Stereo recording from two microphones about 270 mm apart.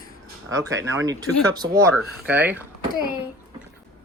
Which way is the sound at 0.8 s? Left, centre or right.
Right.